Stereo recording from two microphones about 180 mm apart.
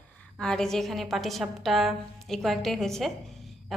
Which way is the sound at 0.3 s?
5° left (ahead or behind).